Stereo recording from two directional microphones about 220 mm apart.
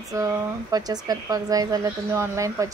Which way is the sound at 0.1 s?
15° right (ahead or behind).